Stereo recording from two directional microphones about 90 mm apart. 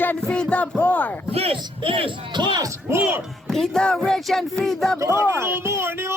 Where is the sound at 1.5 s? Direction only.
90° right; by 2.6 s 60° right (ahead or behind).